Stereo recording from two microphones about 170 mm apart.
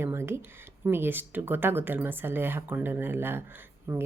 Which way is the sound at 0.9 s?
10° right (ahead or behind).